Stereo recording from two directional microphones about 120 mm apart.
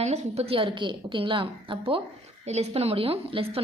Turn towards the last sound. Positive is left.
turn(degrees=-50)  # may be behind; listen again after turning